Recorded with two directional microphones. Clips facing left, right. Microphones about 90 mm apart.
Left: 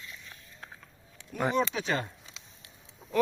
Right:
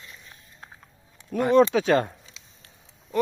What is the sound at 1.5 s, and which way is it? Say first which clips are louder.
Speech: right 14 dB; 70° right (ahead or behind).